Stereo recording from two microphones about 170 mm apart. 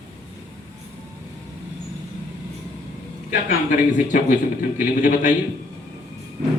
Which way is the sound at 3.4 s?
45° left (ahead or behind).